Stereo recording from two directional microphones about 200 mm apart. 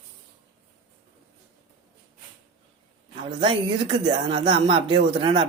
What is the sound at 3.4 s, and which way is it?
Speech, 25° right (ahead or behind).